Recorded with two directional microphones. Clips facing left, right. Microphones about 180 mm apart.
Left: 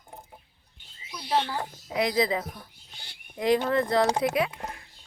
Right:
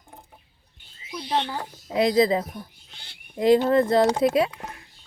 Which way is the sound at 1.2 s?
25° right (ahead or behind).